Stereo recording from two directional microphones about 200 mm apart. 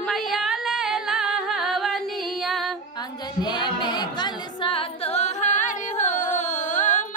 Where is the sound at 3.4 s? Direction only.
20° left (ahead or behind); by 7.0 s 40° left (ahead or behind).